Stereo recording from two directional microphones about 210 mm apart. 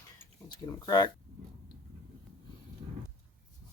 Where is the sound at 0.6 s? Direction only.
20° left (ahead or behind).